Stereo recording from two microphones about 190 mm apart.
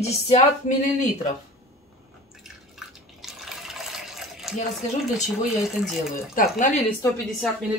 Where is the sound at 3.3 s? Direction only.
Centre (ahead or behind).